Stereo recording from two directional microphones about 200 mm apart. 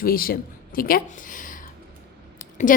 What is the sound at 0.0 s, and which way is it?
Speech, 45° left (ahead or behind).